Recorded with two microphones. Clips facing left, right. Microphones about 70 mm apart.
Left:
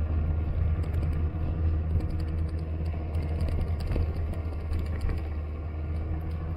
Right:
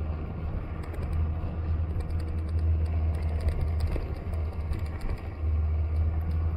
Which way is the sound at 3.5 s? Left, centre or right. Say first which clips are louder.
Left 1 dB; right.